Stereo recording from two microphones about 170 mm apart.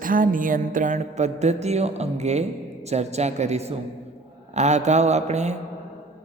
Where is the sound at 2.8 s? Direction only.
40° right (ahead or behind).